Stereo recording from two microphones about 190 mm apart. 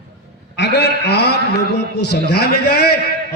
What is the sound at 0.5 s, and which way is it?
A man's voice, 65° left (ahead or behind).